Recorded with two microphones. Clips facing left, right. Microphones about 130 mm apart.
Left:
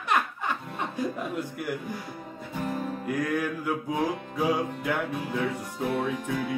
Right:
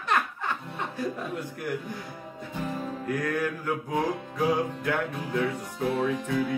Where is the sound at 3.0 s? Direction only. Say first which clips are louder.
Even; 10° left (ahead or behind).